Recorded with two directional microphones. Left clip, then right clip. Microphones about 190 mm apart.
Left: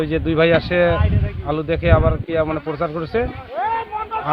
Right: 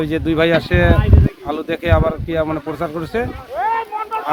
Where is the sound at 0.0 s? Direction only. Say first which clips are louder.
Even; 15° left (ahead or behind).